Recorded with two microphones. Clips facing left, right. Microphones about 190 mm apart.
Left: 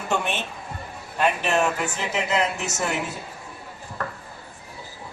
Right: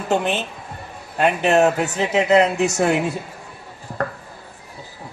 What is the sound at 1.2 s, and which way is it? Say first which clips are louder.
A man's voice: right 6 dB; 40° right (ahead or behind).